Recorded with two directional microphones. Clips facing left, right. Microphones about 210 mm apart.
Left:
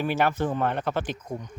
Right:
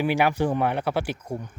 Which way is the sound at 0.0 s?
15° right (ahead or behind).